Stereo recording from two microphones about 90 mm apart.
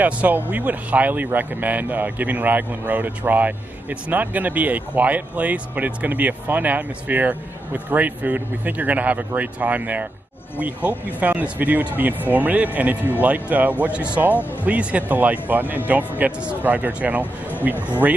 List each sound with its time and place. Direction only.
0.0 s speech: 20° right (ahead or behind)
17.7 s speech: 25° left (ahead or behind)